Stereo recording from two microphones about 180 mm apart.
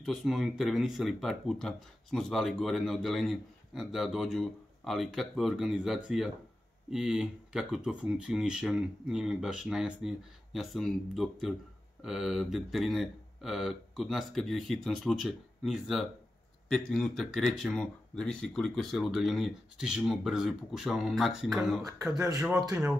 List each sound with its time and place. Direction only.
0.0 s speech: centre (ahead or behind)
22.0 s speech: 20° right (ahead or behind)